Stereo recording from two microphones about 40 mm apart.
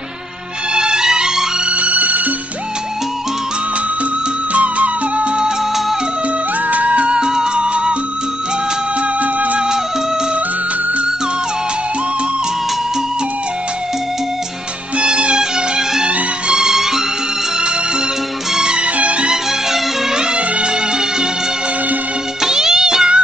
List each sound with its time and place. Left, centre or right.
0.7 s music: centre
1.7 s music: right
4.6 s music: right
6.7 s music: right
7.1 s music: centre
9.2 s music: right
15.0 s music: right; by 17.0 s centre
18.5 s music: centre
18.9 s music: right
22.4 s music: centre